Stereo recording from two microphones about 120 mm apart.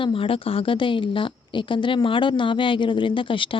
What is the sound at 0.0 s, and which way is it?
A woman's voice, 50° left (ahead or behind).